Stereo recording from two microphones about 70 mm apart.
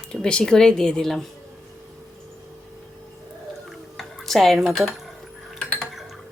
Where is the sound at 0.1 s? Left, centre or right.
Centre.